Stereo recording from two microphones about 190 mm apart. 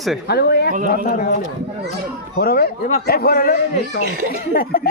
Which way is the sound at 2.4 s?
55° left (ahead or behind).